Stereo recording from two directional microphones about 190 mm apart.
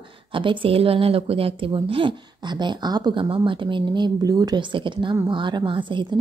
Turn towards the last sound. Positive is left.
turn(degrees=-25)  # may be behind; listen again after turning